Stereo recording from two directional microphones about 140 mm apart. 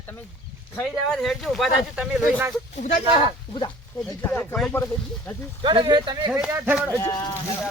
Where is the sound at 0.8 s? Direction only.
5° left (ahead or behind).